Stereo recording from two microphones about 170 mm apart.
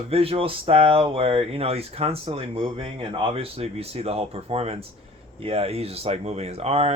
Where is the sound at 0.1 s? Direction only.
35° right (ahead or behind).